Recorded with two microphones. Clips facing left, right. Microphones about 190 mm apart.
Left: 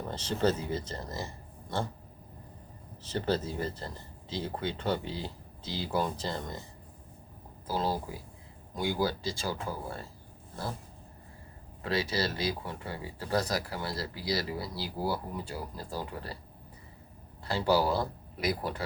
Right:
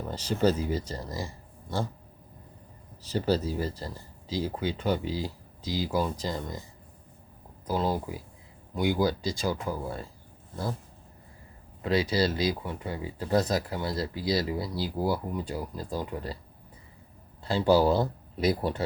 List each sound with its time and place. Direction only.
0.1 s speech: 10° right (ahead or behind)
3.0 s speech: 10° right (ahead or behind)
8.8 s speech: 15° right (ahead or behind)
11.8 s speech: 20° right (ahead or behind)
17.4 s speech: 20° right (ahead or behind)